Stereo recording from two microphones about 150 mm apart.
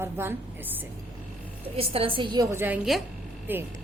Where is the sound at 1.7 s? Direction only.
40° right (ahead or behind).